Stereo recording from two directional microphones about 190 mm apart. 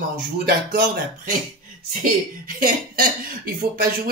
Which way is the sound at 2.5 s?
45° right (ahead or behind).